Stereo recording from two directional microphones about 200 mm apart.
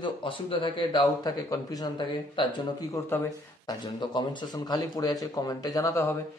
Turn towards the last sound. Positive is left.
turn(degrees=15)  # may be behind; listen again after turning